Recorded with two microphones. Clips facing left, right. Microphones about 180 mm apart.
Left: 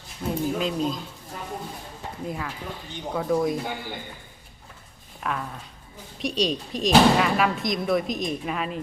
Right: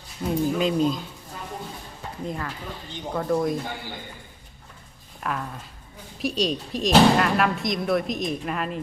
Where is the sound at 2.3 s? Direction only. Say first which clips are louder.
Even; 5° left (ahead or behind).